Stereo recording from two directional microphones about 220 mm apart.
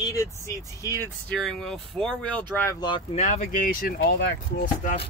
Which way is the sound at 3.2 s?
35° left (ahead or behind).